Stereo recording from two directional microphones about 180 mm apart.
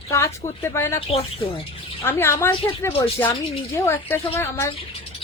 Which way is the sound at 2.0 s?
15° left (ahead or behind).